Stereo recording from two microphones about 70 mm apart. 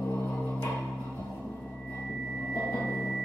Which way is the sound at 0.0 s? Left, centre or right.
Left.